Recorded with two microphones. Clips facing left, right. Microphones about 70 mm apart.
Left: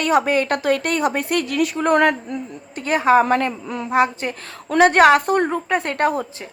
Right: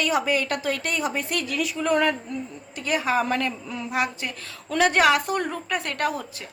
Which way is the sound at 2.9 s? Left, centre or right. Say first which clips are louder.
Left 8 dB; left.